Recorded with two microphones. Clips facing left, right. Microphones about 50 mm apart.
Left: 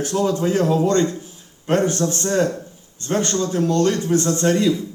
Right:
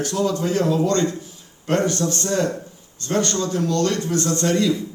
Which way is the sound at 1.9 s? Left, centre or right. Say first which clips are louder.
Left 1 dB; left.